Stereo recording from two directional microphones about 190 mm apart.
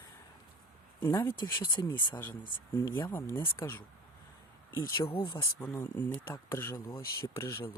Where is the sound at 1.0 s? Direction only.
10° left (ahead or behind).